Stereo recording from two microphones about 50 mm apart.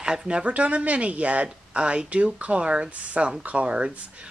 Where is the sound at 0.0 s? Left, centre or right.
Centre.